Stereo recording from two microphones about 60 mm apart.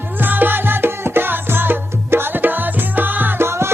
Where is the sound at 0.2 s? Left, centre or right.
Right.